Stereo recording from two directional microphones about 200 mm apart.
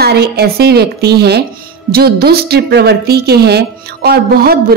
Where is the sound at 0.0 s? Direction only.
55° right (ahead or behind).